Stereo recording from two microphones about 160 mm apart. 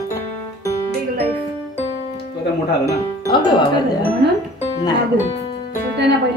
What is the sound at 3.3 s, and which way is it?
Speech, 30° left (ahead or behind).